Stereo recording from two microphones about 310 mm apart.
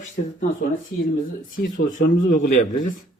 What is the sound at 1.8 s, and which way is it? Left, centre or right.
Speech, left.